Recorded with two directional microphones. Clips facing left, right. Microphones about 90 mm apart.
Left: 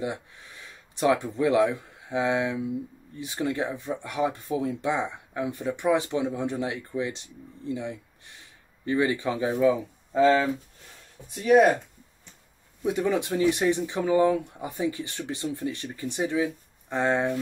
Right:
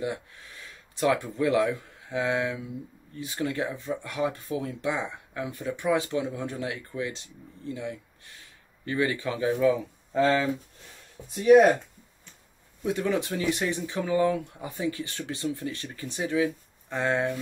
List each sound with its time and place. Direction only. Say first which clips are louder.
0.0 s speech: even; 25° left (ahead or behind)
10.1 s speech: left 3 dB; 5° left (ahead or behind)
12.8 s speech: left 2 dB; 15° left (ahead or behind)